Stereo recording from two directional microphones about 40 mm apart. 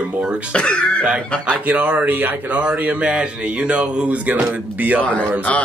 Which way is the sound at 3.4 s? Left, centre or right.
Right.